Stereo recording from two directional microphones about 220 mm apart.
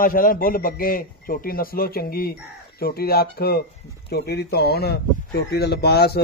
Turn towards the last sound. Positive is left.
turn(degrees=45)  # may be behind; listen again after turning